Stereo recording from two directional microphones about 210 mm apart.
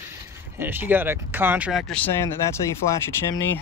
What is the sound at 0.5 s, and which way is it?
Speech, 10° right (ahead or behind).